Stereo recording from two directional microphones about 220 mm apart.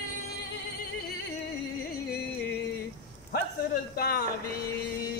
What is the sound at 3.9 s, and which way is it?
Speech, 45° left (ahead or behind).